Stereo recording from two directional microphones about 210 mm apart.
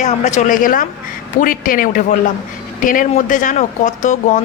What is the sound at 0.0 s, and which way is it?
Speech, 35° left (ahead or behind).